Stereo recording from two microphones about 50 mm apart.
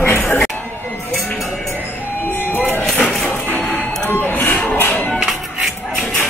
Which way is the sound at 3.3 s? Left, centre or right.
Left.